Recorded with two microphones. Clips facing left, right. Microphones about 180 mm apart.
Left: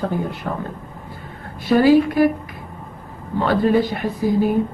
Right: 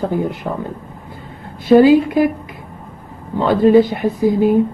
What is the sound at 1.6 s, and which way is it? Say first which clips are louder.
Speech: right 4 dB; 20° right (ahead or behind).